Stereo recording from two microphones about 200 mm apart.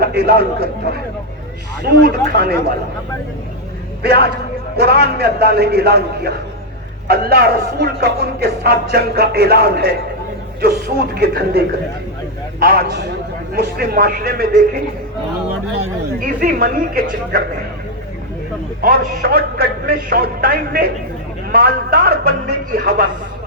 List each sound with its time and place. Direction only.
0.0 s speech: 50° right (ahead or behind)
1.8 s speech: 55° right (ahead or behind)
4.0 s speech: 55° right (ahead or behind)
16.2 s speech: 45° right (ahead or behind)
18.8 s speech: 50° right (ahead or behind)